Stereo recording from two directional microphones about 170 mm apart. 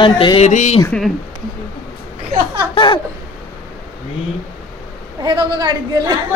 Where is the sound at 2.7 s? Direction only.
30° left (ahead or behind).